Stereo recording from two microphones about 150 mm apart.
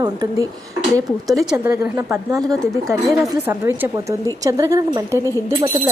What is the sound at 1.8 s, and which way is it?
Speech, 15° right (ahead or behind).